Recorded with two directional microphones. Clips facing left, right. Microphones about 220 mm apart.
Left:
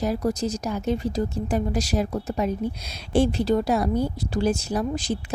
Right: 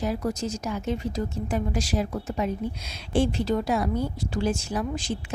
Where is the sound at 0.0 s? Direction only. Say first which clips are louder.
Left 3 dB; 35° left (ahead or behind).